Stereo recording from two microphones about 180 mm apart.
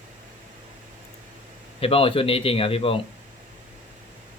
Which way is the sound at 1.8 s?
30° left (ahead or behind).